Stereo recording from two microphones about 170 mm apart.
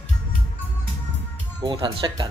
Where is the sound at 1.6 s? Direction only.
30° right (ahead or behind).